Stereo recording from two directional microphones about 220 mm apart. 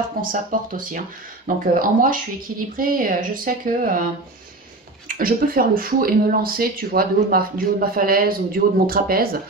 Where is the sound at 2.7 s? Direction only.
40° right (ahead or behind).